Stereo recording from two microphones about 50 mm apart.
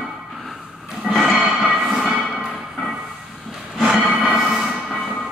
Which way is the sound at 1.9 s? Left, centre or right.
Centre.